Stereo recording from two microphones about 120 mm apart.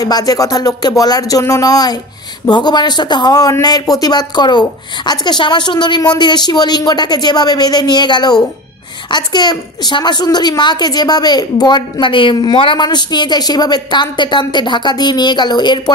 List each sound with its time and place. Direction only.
0.0 s speech: 30° left (ahead or behind)